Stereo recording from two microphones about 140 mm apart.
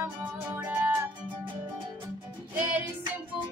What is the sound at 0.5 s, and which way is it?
Music, 10° right (ahead or behind).